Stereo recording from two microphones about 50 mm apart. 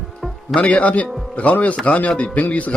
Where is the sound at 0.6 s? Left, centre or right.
Left.